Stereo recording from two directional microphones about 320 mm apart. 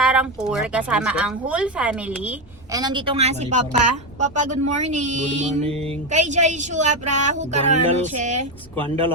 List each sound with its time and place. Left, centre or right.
0.0 s a woman's voice: centre; by 8.4 s right